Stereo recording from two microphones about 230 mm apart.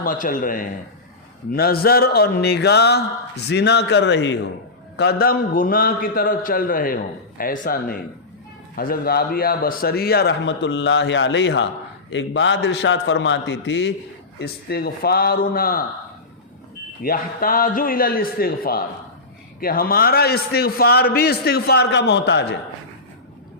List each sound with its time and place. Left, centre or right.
0.0 s a man's voice: left
17.0 s a man's voice: left